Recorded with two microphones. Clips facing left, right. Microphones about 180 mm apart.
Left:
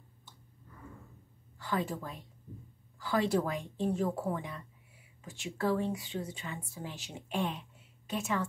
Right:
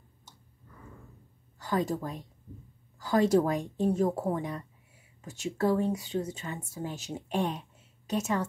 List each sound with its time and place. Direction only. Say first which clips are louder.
1.6 s a woman's voice: right 5 dB; 40° right (ahead or behind)